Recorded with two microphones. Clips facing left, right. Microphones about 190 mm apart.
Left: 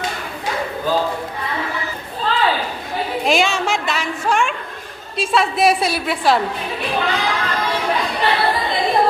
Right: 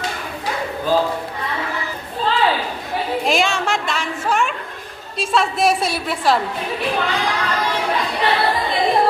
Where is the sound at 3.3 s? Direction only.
Centre (ahead or behind).